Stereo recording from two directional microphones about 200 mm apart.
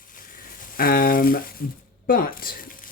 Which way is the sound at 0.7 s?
45° left (ahead or behind).